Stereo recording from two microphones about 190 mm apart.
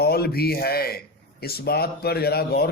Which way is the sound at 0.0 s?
55° left (ahead or behind).